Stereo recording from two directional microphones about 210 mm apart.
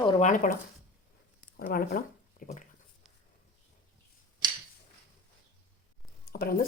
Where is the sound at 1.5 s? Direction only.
45° left (ahead or behind).